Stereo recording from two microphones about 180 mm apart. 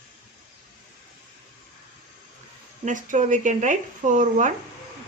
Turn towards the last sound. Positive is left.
turn(degrees=-45)  # may be behind; listen again after turning